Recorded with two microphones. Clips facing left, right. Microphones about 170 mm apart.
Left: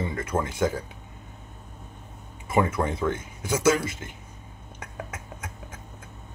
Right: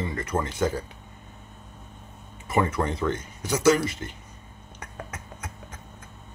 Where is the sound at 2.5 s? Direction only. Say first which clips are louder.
Left 1 dB; 10° left (ahead or behind).